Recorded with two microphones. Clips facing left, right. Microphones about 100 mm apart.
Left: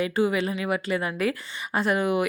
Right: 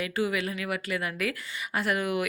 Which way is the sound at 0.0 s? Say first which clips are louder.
Left 5 dB; 25° left (ahead or behind).